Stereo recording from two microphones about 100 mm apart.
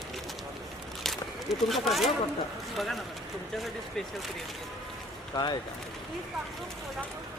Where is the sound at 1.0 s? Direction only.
Centre (ahead or behind).